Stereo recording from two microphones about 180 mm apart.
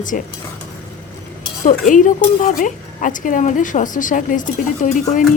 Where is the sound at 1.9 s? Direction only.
45° left (ahead or behind).